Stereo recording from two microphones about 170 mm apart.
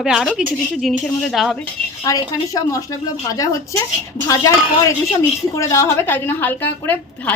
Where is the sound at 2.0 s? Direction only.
20° left (ahead or behind).